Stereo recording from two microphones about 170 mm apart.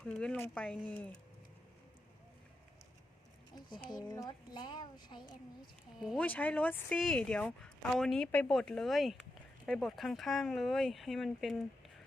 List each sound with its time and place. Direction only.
0.0 s speech: 5° left (ahead or behind)
3.5 s a woman's voice: 25° left (ahead or behind)
6.1 s speech: 10° left (ahead or behind)